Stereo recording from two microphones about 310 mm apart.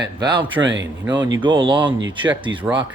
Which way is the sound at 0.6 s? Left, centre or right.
Right.